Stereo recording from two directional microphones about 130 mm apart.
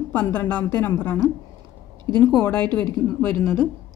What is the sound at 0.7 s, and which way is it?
Speech, 25° left (ahead or behind).